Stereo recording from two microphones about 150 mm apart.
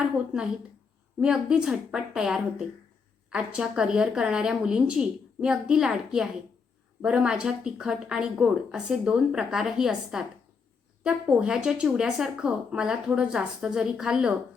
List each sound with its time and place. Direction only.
1.2 s speech: 5° right (ahead or behind)